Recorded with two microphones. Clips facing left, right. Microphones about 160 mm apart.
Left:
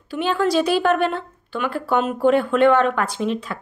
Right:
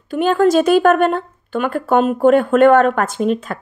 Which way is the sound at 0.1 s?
45° right (ahead or behind).